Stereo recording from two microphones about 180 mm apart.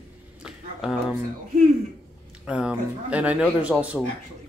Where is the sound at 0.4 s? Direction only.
5° right (ahead or behind).